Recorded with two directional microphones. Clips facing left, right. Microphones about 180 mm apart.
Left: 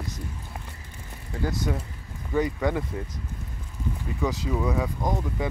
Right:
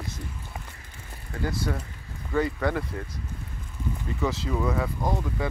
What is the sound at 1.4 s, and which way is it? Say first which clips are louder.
Speech: left 1 dB; 15° left (ahead or behind).